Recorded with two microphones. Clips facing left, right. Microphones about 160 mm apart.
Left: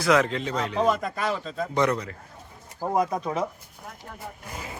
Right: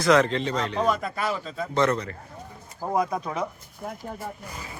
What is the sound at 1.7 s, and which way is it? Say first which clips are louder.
A man's voice: right 1 dB; 10° left (ahead or behind).